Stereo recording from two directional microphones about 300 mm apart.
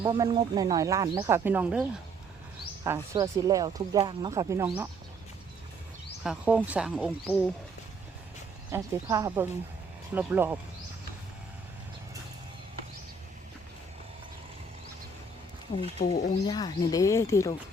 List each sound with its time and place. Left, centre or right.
0.0 s speech: centre
2.8 s speech: centre
6.2 s speech: centre
8.7 s speech: centre
16.0 s speech: left
16.5 s speech: centre